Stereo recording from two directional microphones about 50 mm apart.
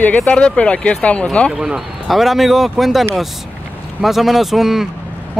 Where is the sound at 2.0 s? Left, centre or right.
Centre.